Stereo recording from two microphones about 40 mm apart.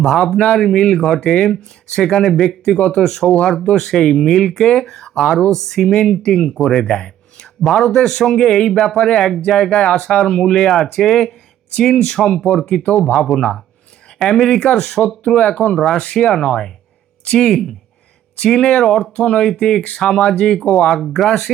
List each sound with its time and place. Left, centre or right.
0.0 s speech: centre
2.2 s speech: centre
2.7 s speech: centre
5.9 s speech: centre
18.3 s speech: left
19.1 s speech: left